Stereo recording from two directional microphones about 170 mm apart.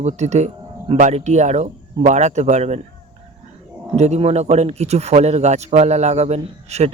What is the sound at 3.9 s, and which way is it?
Speech, 40° right (ahead or behind).